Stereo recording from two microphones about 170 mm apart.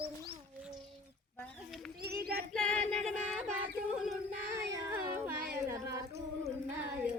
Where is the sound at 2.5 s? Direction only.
5° left (ahead or behind).